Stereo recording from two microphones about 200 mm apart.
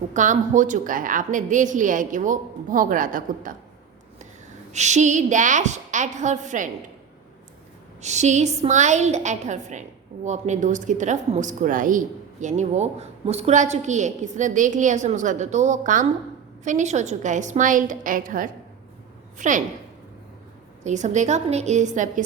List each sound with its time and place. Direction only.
0.1 s speech: 40° right (ahead or behind)
4.7 s speech: 35° right (ahead or behind)
8.0 s speech: 35° right (ahead or behind)
20.8 s speech: 35° right (ahead or behind)